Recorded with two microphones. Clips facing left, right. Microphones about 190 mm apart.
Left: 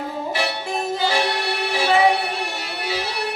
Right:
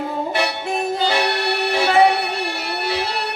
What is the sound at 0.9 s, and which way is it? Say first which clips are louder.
Music: even; 60° right (ahead or behind).